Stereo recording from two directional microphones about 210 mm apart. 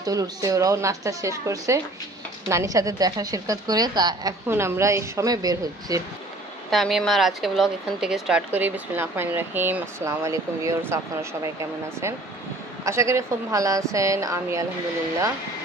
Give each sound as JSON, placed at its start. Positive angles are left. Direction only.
{"t": 0.0, "sound": "a woman's voice", "side_deg": -15}
{"t": 6.7, "sound": "a woman's voice", "side_deg": 0}
{"t": 12.8, "sound": "a woman's voice", "side_deg": -15}